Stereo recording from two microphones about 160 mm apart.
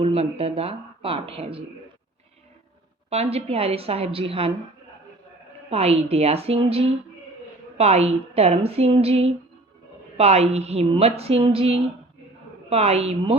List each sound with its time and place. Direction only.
0.0 s a woman's voice: 40° right (ahead or behind)
3.1 s a woman's voice: 40° right (ahead or behind)
5.7 s a woman's voice: 40° right (ahead or behind)